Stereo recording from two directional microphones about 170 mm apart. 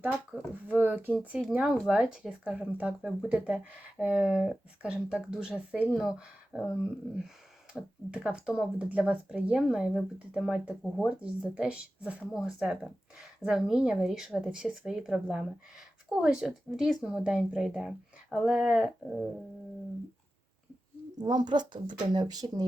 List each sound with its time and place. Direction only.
0.0 s speech: 5° right (ahead or behind)
7.7 s speech: 5° right (ahead or behind)
21.2 s a woman's voice: 25° right (ahead or behind)